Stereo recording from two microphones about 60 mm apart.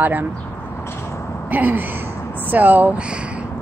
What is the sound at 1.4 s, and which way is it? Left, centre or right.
Gasp, right.